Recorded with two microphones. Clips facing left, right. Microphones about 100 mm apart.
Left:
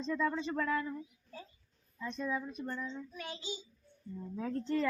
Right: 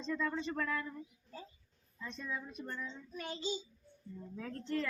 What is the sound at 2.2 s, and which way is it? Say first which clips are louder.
Speech: left 6 dB; 20° left (ahead or behind).